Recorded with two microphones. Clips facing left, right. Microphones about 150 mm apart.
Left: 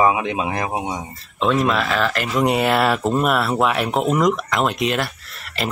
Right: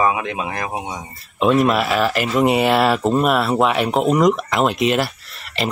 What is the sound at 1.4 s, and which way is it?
Speech, 10° right (ahead or behind).